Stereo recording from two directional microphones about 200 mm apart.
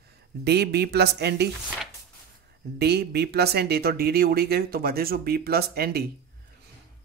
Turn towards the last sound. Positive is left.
turn(degrees=-50)  # may be behind; listen again after turning